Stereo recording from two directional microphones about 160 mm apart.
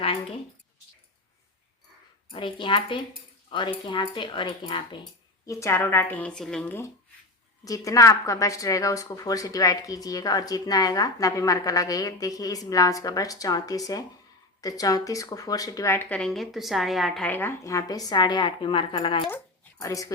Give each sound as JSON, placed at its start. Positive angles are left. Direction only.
{"t": 0.0, "sound": "speech", "side_deg": 35}
{"t": 2.3, "sound": "speech", "side_deg": 30}
{"t": 5.5, "sound": "a woman's voice", "side_deg": 20}
{"t": 17.2, "sound": "a woman's voice", "side_deg": 15}
{"t": 19.8, "sound": "a woman's voice", "side_deg": 20}